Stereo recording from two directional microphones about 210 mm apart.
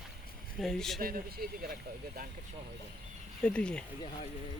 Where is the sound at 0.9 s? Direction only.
45° right (ahead or behind).